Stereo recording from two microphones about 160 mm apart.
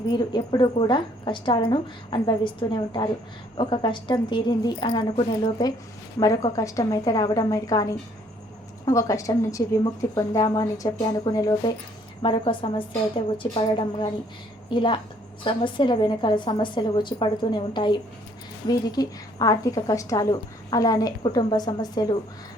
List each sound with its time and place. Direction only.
0.1 s a woman's voice: 30° left (ahead or behind)